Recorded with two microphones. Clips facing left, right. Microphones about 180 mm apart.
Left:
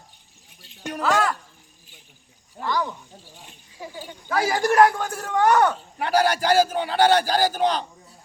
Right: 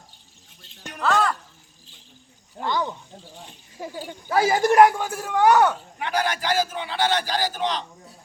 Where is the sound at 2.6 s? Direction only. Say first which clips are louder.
Even; 25° right (ahead or behind).